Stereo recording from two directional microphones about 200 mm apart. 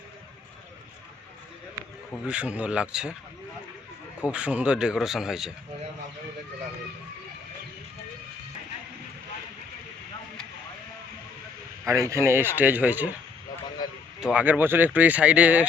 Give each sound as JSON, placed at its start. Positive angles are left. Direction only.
{"t": 2.2, "sound": "speech", "side_deg": -5}
{"t": 4.2, "sound": "speech", "side_deg": -5}
{"t": 11.9, "sound": "speech", "side_deg": -15}
{"t": 13.8, "sound": "a sound", "side_deg": 20}
{"t": 14.2, "sound": "speech", "side_deg": -5}